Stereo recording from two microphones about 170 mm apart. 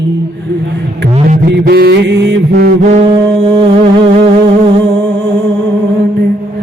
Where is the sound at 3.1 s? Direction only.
30° right (ahead or behind).